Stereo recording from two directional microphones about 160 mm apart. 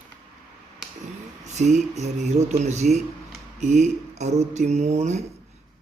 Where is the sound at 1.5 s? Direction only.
45° right (ahead or behind).